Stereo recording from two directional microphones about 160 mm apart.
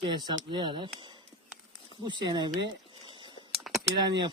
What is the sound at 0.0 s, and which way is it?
Speech, 30° right (ahead or behind).